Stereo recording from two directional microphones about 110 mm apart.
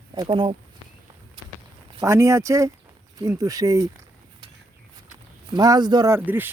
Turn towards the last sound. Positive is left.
turn(degrees=-15)  # may be behind; listen again after turning